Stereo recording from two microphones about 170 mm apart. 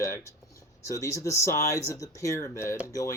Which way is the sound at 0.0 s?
15° left (ahead or behind).